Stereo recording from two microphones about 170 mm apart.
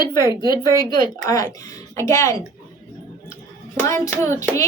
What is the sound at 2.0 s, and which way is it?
Speech, 15° left (ahead or behind).